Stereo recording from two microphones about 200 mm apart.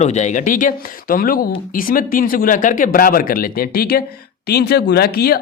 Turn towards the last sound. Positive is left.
turn(degrees=50)  # may be behind; listen again after turning